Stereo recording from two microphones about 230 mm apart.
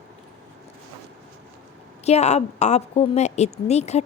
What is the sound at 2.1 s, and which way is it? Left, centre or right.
Speech, left.